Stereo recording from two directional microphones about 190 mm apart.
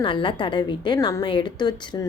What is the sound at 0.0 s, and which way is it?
A woman's voice, 25° left (ahead or behind).